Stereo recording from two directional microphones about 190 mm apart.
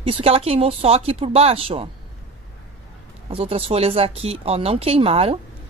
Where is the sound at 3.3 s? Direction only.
30° right (ahead or behind).